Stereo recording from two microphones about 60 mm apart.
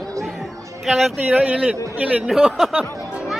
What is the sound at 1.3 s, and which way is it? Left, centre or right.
Speech, right.